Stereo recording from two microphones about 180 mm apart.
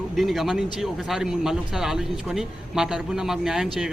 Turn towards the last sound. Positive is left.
turn(degrees=-5)  # may be behind; listen again after turning